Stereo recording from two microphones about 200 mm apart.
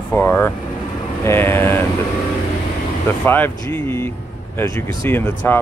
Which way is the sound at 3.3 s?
10° left (ahead or behind).